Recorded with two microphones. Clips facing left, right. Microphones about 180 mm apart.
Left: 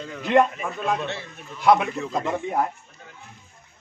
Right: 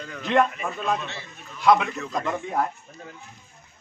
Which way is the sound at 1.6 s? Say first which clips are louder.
Left 1 dB; 20° left (ahead or behind).